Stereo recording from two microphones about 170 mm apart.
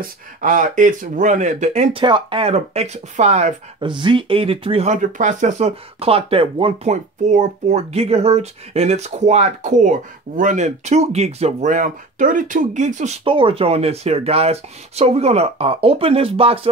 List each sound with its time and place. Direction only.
0.0 s speech: 50° right (ahead or behind)
2.0 s speech: 30° right (ahead or behind)
3.8 s speech: 30° right (ahead or behind)